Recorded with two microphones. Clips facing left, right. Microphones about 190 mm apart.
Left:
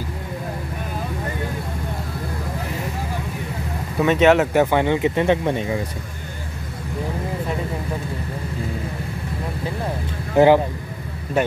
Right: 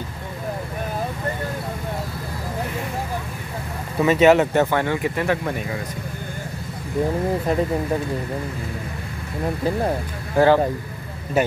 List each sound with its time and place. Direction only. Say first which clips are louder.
4.0 s speech: right 1 dB; 5° right (ahead or behind)
4.6 s speech: left 2 dB; 15° left (ahead or behind)
10.3 s speech: left 2 dB; 15° left (ahead or behind)
11.4 s speech: even; 5° right (ahead or behind)